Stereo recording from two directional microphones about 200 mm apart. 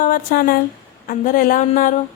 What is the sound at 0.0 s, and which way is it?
A woman's voice, 45° left (ahead or behind).